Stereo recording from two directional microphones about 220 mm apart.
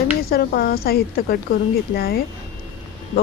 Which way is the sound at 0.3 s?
45° left (ahead or behind).